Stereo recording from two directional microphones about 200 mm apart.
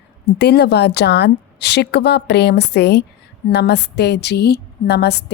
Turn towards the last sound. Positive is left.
turn(degrees=55)  # may be behind; listen again after turning